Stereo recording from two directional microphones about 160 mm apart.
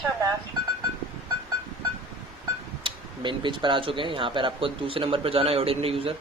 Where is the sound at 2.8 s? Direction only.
30° right (ahead or behind).